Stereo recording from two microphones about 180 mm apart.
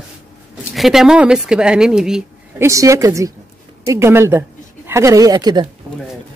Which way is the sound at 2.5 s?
15° right (ahead or behind).